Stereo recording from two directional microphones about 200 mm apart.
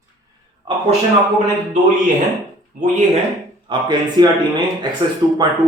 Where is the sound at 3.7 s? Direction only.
20° right (ahead or behind).